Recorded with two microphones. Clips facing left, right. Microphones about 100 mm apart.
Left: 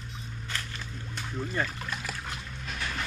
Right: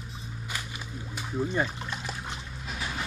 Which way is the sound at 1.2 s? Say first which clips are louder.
Right 5 dB; 10° right (ahead or behind).